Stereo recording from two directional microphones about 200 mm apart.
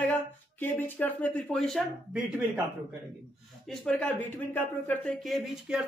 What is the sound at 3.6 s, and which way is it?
Speech, 5° left (ahead or behind).